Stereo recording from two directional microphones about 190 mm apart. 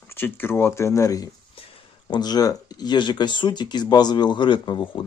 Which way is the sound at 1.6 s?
30° left (ahead or behind).